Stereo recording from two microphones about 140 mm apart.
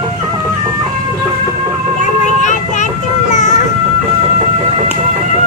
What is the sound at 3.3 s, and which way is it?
Vehicle, 60° left (ahead or behind).